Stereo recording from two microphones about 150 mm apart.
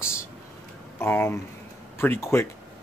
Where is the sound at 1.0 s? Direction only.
15° left (ahead or behind).